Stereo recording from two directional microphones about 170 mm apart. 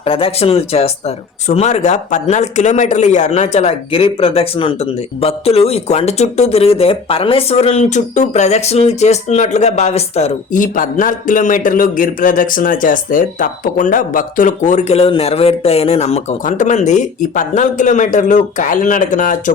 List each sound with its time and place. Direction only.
0.0 s speech: 35° left (ahead or behind); by 19.5 s 50° left (ahead or behind)